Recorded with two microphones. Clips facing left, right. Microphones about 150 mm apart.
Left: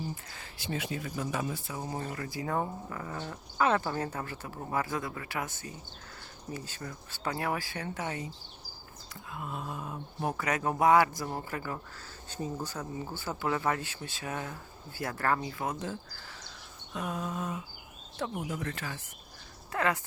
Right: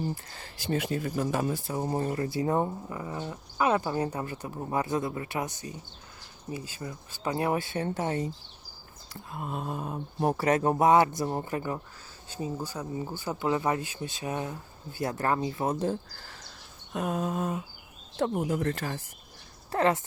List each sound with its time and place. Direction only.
0.3 s speech: 45° right (ahead or behind)
9.3 s speech: 45° right (ahead or behind); by 11.8 s 20° right (ahead or behind)
12.3 s speech: 10° right (ahead or behind); by 16.4 s 40° right (ahead or behind)
16.9 s mantra: 50° right (ahead or behind)
18.2 s speech: 40° right (ahead or behind)
19.7 s speech: 30° right (ahead or behind)